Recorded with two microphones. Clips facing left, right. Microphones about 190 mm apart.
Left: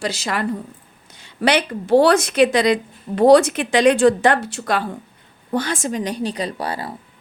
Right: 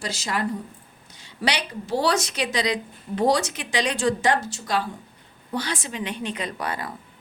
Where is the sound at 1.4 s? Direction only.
55° left (ahead or behind).